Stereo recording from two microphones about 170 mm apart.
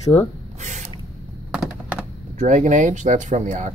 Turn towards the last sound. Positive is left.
turn(degrees=-45)  # may be behind; listen again after turning